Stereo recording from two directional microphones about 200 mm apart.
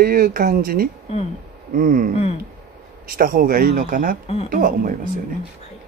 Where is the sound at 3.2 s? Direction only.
45° right (ahead or behind).